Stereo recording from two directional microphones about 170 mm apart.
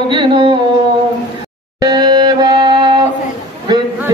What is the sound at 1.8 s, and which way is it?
Music, 25° right (ahead or behind).